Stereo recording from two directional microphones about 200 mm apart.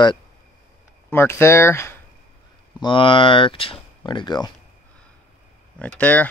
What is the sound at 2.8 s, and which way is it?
Speech, 25° left (ahead or behind).